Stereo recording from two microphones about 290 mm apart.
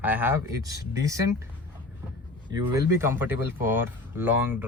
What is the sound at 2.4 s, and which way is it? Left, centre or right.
A man's voice, centre.